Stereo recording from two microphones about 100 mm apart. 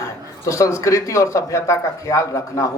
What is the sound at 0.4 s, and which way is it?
Speech, 30° left (ahead or behind).